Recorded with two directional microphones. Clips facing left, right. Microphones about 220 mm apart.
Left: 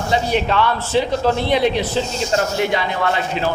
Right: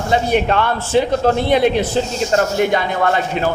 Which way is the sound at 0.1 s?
50° right (ahead or behind).